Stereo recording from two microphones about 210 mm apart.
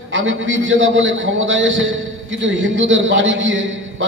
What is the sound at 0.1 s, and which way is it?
A man's voice, 65° right (ahead or behind).